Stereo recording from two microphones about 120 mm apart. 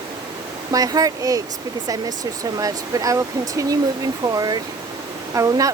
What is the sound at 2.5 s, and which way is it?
Speech, 30° right (ahead or behind).